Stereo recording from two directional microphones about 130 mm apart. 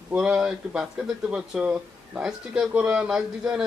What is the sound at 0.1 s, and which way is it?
Speech, 5° right (ahead or behind).